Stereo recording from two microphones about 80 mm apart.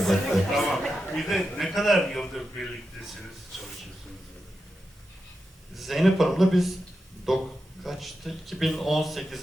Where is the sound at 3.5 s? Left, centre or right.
Centre.